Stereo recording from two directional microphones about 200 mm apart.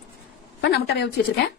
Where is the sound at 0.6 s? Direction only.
55° left (ahead or behind).